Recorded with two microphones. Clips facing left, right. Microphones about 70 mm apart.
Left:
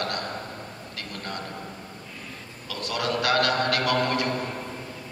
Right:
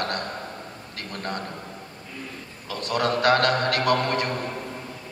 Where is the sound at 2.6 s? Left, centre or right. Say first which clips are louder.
Right 4 dB; right.